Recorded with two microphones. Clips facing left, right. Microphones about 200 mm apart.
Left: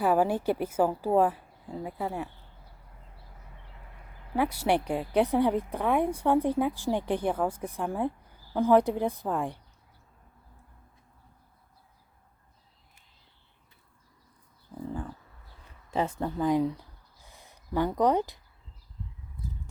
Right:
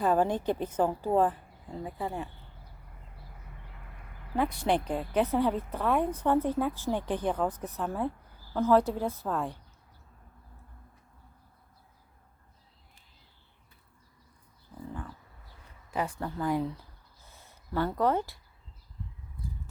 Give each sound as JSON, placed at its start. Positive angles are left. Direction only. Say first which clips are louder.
{"t": 0.0, "sound": "a woman's voice", "louder": "left 2 dB", "side_deg": 10}
{"t": 4.4, "sound": "a woman's voice", "louder": "left 2 dB", "side_deg": 10}
{"t": 15.9, "sound": "speech", "louder": "left 4 dB", "side_deg": 25}
{"t": 17.2, "sound": "a sound", "louder": "left 3 dB", "side_deg": 15}